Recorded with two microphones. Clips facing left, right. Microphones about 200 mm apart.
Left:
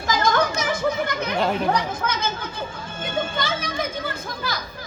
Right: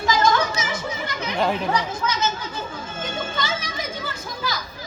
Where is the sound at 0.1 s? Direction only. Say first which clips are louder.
Even; 55° left (ahead or behind).